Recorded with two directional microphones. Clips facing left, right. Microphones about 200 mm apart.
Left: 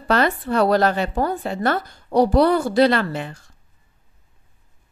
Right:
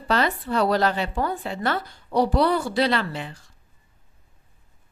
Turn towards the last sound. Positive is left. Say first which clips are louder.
# left 5 dB
turn(degrees=50)  # may be behind; listen again after turning